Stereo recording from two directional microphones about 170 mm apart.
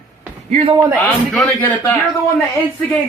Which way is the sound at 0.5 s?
35° right (ahead or behind).